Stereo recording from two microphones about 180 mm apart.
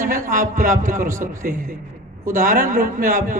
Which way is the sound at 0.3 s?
50° right (ahead or behind).